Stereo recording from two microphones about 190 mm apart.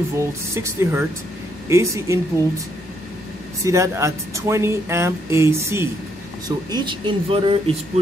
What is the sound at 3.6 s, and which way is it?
Speech, 15° right (ahead or behind).